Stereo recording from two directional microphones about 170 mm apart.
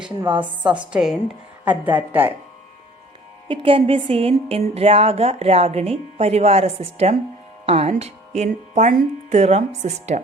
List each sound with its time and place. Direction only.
0.2 s a woman's voice: 30° right (ahead or behind)
0.9 s a woman's voice: 5° right (ahead or behind)
3.5 s speech: 30° right (ahead or behind)